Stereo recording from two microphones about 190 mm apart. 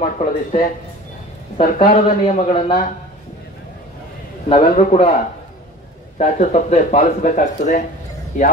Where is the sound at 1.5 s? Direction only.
30° left (ahead or behind).